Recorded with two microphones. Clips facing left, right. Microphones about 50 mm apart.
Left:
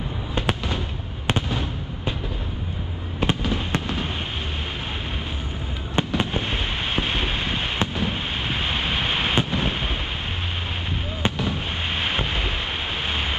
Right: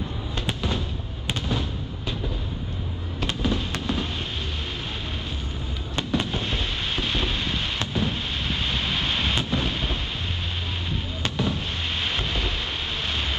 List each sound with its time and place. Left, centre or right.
0.3 s fireworks: left
3.2 s fireworks: left
5.9 s fireworks: left
11.2 s fireworks: left
13.1 s waves: left